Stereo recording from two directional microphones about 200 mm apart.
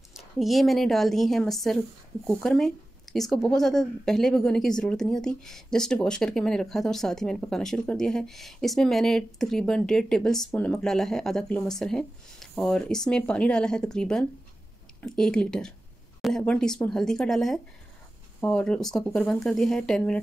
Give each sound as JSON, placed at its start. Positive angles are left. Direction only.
{"t": 0.1, "sound": "a woman's voice", "side_deg": 0}